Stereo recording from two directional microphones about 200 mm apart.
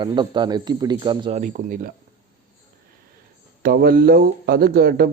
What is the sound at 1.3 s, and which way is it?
Speech, 40° right (ahead or behind).